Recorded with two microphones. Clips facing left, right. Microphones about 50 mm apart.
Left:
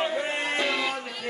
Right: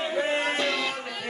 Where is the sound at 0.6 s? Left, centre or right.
Centre.